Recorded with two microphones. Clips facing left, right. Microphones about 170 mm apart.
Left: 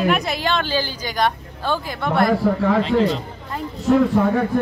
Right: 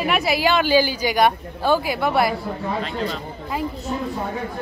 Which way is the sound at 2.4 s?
85° left.